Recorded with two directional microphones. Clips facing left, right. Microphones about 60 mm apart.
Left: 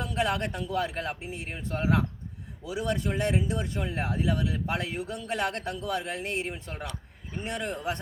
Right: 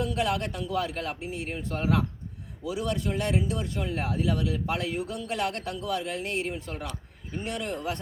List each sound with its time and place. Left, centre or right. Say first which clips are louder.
0.0 s speech: right 1 dB; left